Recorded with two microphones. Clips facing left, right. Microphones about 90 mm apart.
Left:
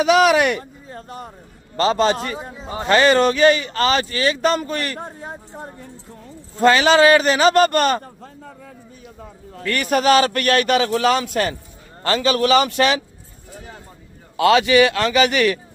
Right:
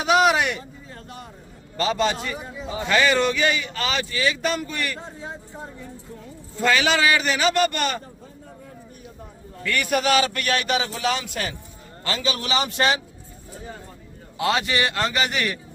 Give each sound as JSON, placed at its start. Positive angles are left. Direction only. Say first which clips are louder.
{"t": 0.0, "sound": "speech", "louder": "left 4 dB", "side_deg": 85}
{"t": 0.9, "sound": "vehicle", "louder": "left 5 dB", "side_deg": 35}
{"t": 1.8, "sound": "a man's voice", "louder": "left 5 dB", "side_deg": 40}
{"t": 2.3, "sound": "a man's voice", "louder": "left 2 dB", "side_deg": 35}
{"t": 4.9, "sound": "a man's voice", "louder": "left 3 dB", "side_deg": 55}
{"t": 6.6, "sound": "a man's voice", "louder": "left 7 dB", "side_deg": 40}
{"t": 9.6, "sound": "a man's voice", "louder": "left 5 dB", "side_deg": 40}
{"t": 14.3, "sound": "a man's voice", "louder": "left 9 dB", "side_deg": 85}